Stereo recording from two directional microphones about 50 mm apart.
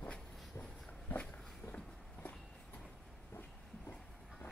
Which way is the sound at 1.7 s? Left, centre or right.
Left.